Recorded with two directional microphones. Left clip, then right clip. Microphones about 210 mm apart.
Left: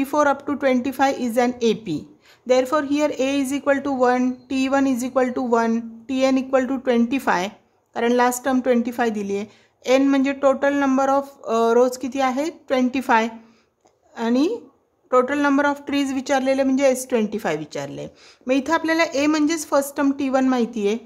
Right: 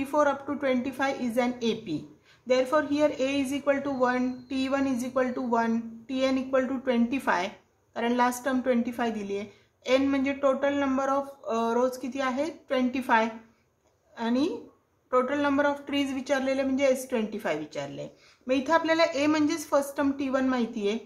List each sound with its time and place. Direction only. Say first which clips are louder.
0.0 s speech: left 6 dB; 45° left (ahead or behind)